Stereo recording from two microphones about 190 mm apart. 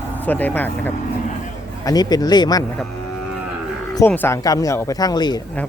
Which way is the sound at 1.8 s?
20° left (ahead or behind).